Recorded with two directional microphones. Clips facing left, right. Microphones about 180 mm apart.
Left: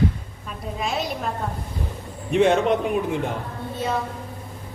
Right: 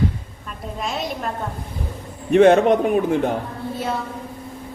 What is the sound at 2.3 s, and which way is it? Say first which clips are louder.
Speech: right 5 dB; 55° right (ahead or behind).